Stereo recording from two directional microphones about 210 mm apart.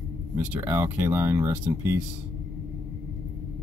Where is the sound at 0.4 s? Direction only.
10° right (ahead or behind).